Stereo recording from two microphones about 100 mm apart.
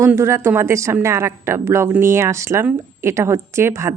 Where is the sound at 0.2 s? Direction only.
25° right (ahead or behind).